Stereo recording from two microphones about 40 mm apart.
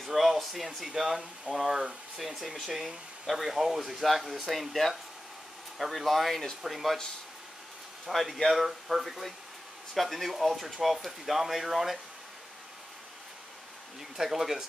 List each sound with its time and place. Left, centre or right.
0.0 s speech: centre
8.1 s speech: centre
14.1 s speech: centre